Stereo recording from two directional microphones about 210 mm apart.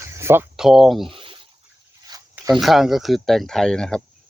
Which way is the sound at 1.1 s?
25° right (ahead or behind).